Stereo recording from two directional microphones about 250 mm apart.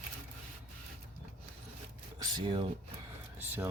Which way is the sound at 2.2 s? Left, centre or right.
Centre.